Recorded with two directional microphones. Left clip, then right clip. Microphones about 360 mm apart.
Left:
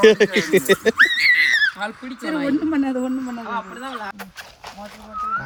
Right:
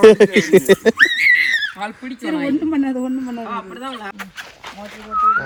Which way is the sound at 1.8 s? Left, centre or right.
Centre.